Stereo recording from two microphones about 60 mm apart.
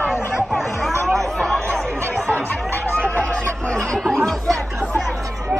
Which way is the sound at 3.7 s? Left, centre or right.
Centre.